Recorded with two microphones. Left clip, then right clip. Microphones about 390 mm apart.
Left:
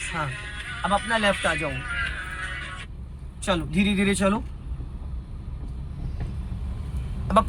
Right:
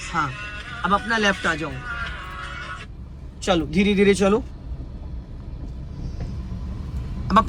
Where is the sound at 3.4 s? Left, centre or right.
Right.